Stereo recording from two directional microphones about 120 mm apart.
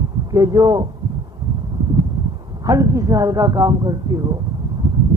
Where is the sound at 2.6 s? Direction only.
30° right (ahead or behind).